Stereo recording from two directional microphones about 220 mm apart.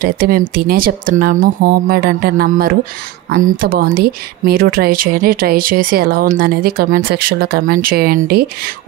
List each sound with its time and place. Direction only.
0.0 s speech: 40° right (ahead or behind)